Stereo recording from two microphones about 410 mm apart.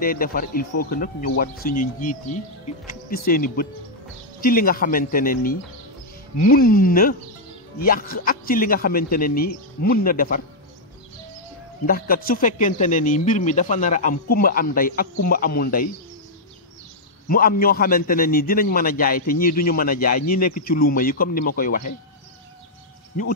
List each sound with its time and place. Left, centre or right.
0.0 s speech: left
11.8 s speech: left
17.3 s speech: left